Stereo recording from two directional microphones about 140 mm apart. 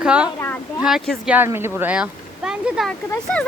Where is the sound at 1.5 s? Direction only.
15° right (ahead or behind).